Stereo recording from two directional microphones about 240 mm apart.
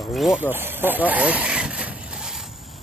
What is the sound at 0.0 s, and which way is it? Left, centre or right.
Speech, centre.